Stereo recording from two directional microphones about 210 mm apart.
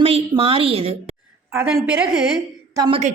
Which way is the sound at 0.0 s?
25° right (ahead or behind).